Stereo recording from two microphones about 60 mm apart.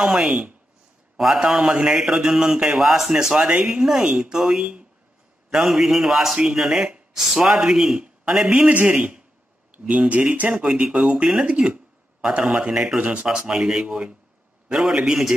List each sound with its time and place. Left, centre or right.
0.0 s speech: centre